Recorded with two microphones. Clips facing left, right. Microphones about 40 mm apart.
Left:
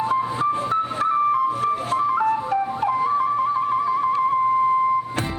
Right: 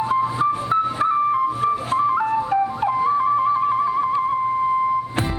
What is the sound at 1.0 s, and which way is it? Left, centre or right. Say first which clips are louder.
Music: left 2 dB; centre.